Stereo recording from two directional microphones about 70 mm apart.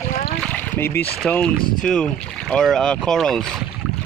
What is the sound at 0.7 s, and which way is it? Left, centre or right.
Speech, left.